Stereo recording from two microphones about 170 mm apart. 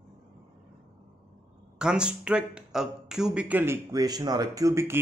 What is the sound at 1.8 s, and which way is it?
Speech, 5° right (ahead or behind).